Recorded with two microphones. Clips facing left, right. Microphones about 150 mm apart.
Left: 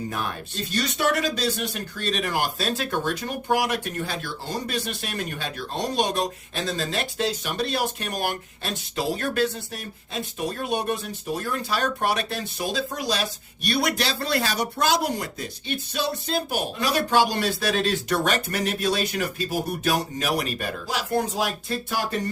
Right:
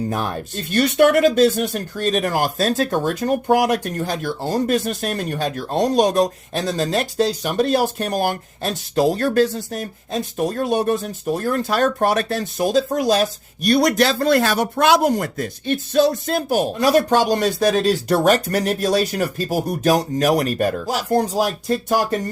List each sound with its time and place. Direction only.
0.7 s speech: 60° right (ahead or behind)